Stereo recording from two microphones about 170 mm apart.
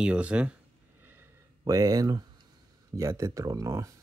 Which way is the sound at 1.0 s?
10° right (ahead or behind).